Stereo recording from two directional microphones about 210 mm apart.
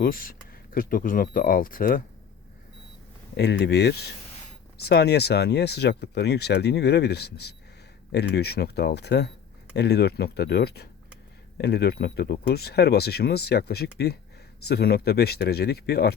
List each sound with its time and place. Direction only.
0.0 s speech: 40° left (ahead or behind)
3.3 s speech: 50° left (ahead or behind)